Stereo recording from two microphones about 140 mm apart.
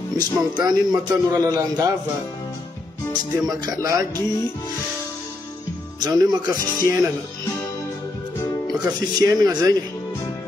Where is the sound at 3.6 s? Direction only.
25° right (ahead or behind).